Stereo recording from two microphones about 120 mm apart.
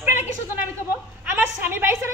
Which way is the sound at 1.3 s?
15° right (ahead or behind).